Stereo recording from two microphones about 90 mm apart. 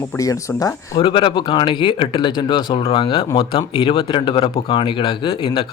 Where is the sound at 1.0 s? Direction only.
70° left (ahead or behind).